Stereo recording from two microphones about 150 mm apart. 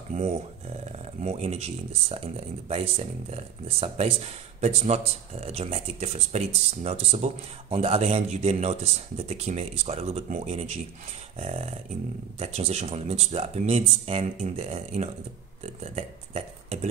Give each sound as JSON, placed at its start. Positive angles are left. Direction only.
{"t": 0.1, "sound": "speech", "side_deg": -45}